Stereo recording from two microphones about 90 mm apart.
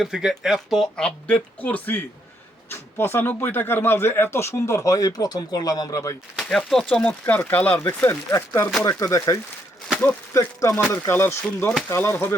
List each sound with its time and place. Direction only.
0.0 s speech: 5° right (ahead or behind); by 6.0 s 45° left (ahead or behind)
6.3 s speech: 5° left (ahead or behind)
6.8 s speech: 15° left (ahead or behind)
8.4 s speech: 35° left (ahead or behind)